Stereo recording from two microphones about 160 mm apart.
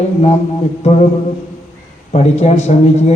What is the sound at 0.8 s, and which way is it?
Speech, 40° left (ahead or behind).